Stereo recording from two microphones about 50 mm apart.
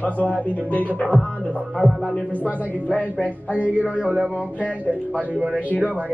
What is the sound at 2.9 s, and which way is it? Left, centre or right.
Speech, left.